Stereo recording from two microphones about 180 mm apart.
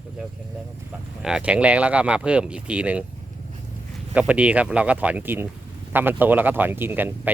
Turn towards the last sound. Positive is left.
turn(degrees=-10)  # may be behind; listen again after turning